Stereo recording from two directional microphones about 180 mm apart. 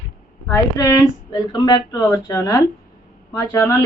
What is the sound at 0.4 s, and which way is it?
A woman's voice, 15° left (ahead or behind).